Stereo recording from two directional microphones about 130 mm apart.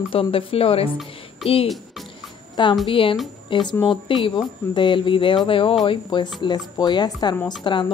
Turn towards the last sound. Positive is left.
turn(degrees=40)  # may be behind; listen again after turning